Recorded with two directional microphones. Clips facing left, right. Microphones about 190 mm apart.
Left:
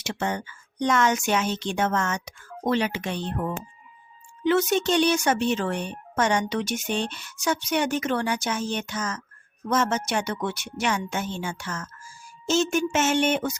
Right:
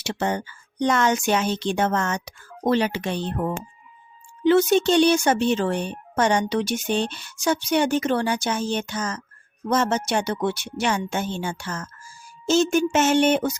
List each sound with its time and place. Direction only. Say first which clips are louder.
0.0 s speech: right 3 dB; 35° right (ahead or behind)